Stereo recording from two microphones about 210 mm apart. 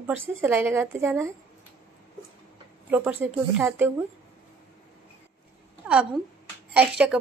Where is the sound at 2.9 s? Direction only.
10° right (ahead or behind).